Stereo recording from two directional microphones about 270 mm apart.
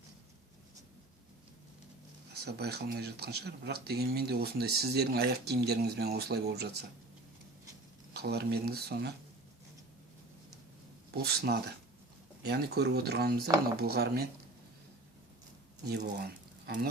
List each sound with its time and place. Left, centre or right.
2.4 s speech: right
8.1 s speech: right
11.1 s speech: right
15.9 s speech: right